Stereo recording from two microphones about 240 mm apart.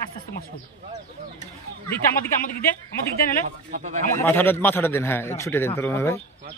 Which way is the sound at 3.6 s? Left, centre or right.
Right.